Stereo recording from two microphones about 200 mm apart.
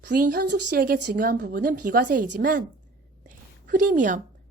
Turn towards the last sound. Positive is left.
turn(degrees=-40)  # may be behind; listen again after turning